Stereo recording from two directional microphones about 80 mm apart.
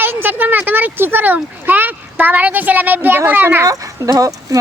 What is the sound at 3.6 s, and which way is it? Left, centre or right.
Speech, right.